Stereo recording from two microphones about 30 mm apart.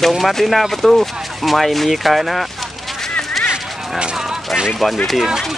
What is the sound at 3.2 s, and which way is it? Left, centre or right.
Honk, centre.